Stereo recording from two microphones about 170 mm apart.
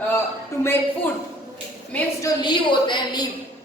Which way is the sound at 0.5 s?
15° left (ahead or behind).